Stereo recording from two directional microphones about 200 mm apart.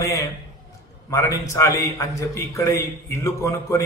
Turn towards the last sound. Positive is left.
turn(degrees=15)  # may be behind; listen again after turning